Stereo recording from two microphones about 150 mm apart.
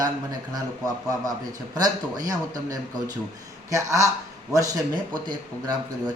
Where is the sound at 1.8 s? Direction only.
25° right (ahead or behind).